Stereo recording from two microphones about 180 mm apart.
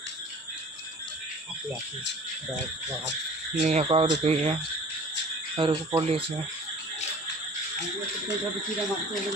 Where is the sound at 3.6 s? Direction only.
35° right (ahead or behind).